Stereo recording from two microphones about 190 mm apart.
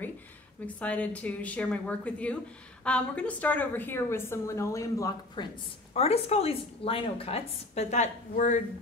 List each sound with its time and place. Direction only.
0.7 s a woman's voice: 5° left (ahead or behind)
5.9 s a woman's voice: 35° left (ahead or behind)